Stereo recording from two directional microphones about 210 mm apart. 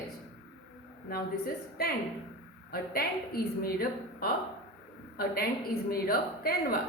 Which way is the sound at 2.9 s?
45° left (ahead or behind).